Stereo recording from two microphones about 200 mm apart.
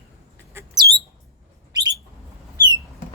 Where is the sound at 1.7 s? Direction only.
20° right (ahead or behind).